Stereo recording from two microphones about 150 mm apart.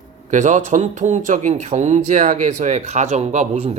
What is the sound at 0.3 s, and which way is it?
Speech, 50° right (ahead or behind).